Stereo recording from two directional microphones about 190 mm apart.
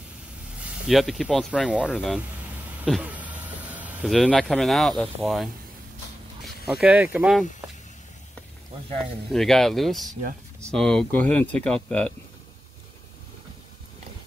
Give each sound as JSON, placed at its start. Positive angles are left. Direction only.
{"t": 0.8, "sound": "speech", "side_deg": 0}
{"t": 9.3, "sound": "speech", "side_deg": 0}